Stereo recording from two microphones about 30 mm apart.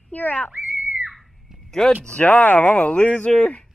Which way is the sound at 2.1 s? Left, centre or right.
Left.